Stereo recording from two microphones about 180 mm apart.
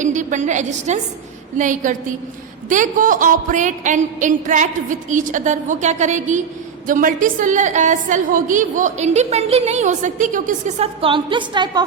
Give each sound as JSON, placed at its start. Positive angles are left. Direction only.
{"t": 0.0, "sound": "a woman's voice", "side_deg": -45}
{"t": 11.0, "sound": "a woman's voice", "side_deg": -25}